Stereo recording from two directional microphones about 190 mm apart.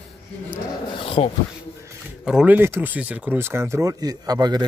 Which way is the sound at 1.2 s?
30° left (ahead or behind).